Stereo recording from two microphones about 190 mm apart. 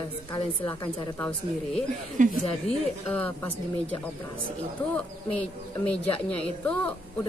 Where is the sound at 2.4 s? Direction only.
30° left (ahead or behind).